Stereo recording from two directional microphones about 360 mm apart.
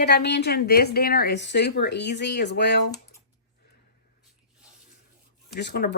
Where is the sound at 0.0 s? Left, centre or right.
Left.